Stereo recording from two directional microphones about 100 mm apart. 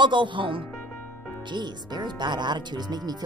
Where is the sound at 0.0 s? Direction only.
50° right (ahead or behind).